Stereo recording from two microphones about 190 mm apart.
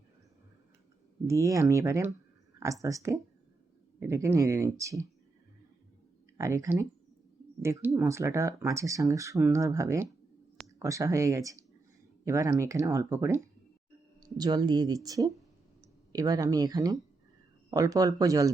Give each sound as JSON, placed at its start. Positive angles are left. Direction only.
{"t": 1.3, "sound": "speech", "side_deg": -15}
{"t": 6.3, "sound": "speech", "side_deg": -15}